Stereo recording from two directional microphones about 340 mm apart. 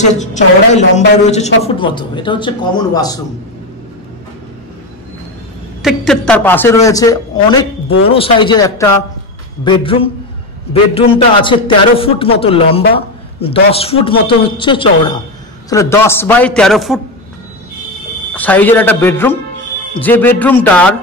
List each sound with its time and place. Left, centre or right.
0.0 s a woman's voice: left
5.8 s a woman's voice: centre
18.3 s a man's voice: centre